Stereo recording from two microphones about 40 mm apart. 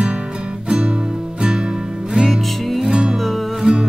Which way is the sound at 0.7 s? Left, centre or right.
Right.